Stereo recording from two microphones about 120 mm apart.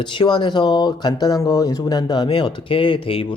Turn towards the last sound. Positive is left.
turn(degrees=50)  # may be behind; listen again after turning